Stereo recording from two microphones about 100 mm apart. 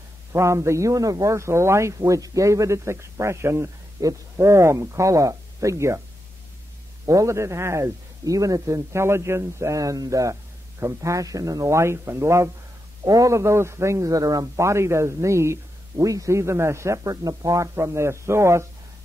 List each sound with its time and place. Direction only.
0.3 s a man's voice: 30° right (ahead or behind)
7.1 s a man's voice: 30° right (ahead or behind)